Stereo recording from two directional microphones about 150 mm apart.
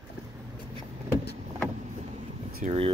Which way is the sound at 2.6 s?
40° right (ahead or behind).